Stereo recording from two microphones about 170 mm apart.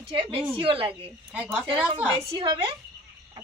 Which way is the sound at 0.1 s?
30° right (ahead or behind).